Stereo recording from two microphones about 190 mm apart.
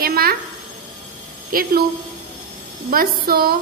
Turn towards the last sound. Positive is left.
turn(degrees=-50)  # may be behind; listen again after turning